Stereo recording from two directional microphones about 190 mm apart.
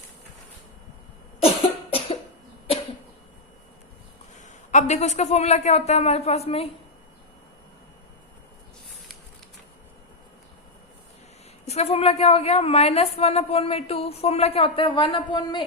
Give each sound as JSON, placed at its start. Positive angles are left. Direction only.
{"t": 1.5, "sound": "cough", "side_deg": 30}
{"t": 4.4, "sound": "a woman's voice", "side_deg": 40}
{"t": 11.6, "sound": "a woman's voice", "side_deg": 35}